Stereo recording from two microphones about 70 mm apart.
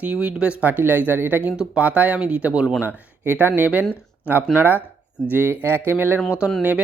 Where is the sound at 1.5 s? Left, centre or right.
Centre.